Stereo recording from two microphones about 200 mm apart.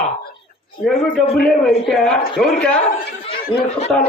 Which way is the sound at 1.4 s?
Centre (ahead or behind).